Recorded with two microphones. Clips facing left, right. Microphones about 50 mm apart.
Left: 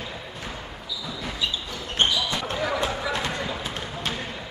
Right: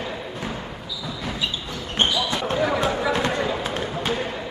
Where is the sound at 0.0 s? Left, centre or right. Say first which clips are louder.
Right 5 dB; centre.